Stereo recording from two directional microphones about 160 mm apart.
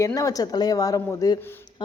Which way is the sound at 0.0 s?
20° left (ahead or behind).